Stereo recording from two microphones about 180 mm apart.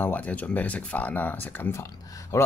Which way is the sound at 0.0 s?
10° left (ahead or behind).